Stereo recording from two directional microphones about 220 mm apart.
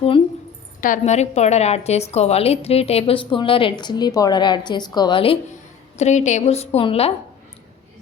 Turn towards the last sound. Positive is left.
turn(degrees=25)  # may be behind; listen again after turning